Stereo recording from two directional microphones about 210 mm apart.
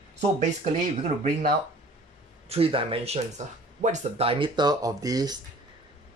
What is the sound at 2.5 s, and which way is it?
Speech, 25° right (ahead or behind).